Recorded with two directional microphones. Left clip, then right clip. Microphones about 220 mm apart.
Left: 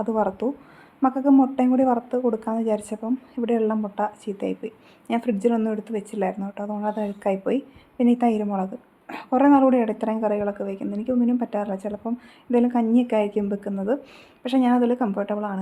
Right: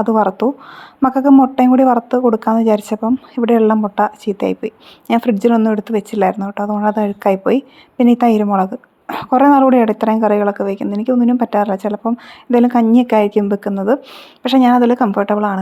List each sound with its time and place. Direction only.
0.0 s speech: 25° right (ahead or behind)